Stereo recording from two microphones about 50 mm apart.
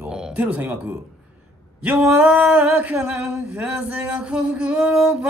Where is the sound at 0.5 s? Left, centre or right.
Right.